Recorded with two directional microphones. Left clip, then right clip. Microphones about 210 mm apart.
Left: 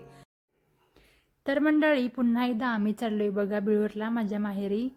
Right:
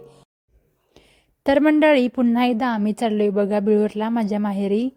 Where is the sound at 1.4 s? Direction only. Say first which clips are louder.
Right 9 dB; 30° right (ahead or behind).